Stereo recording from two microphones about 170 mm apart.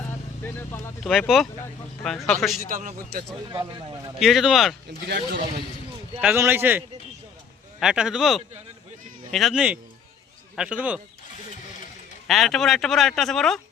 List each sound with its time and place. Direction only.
0.4 s speech: 15° left (ahead or behind)
1.3 s a man's voice: centre (ahead or behind)
2.6 s a man's voice: 55° right (ahead or behind)
3.6 s a man's voice: 25° right (ahead or behind)
4.2 s a man's voice: centre (ahead or behind)
5.0 s speech: 80° right
6.1 s a man's voice: 10° right (ahead or behind)
12.3 s a man's voice: centre (ahead or behind)